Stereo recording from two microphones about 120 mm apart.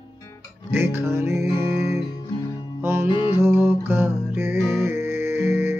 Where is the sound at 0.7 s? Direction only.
20° right (ahead or behind).